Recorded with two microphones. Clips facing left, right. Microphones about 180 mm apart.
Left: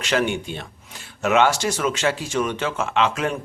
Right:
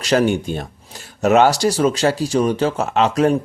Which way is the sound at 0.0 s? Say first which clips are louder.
Right 6 dB; 40° right (ahead or behind).